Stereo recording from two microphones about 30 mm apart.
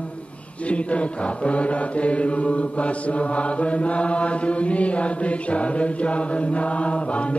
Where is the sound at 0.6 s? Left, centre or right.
Left.